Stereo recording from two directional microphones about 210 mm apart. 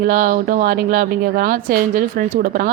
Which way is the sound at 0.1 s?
40° right (ahead or behind).